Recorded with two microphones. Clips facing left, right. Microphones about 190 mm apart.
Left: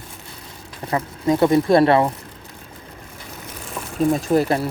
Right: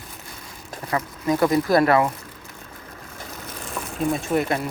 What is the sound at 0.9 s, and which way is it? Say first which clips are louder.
Speech: left 3 dB; 25° left (ahead or behind).